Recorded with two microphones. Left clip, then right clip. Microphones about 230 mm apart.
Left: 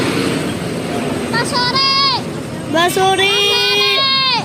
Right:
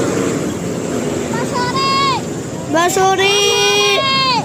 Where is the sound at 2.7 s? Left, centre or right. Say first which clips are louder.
Even; centre.